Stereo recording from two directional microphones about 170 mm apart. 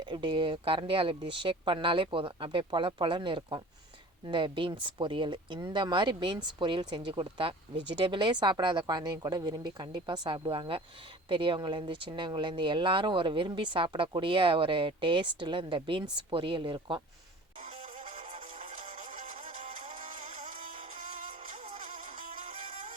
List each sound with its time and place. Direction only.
0.0 s speech: 30° right (ahead or behind)
17.6 s music: 45° right (ahead or behind)